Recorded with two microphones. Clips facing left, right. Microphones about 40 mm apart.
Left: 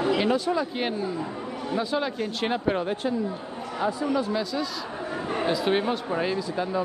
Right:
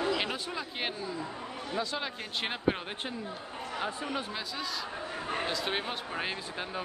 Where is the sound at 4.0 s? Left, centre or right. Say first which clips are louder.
Left 9 dB; right.